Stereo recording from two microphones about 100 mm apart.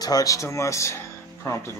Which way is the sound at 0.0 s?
40° left (ahead or behind).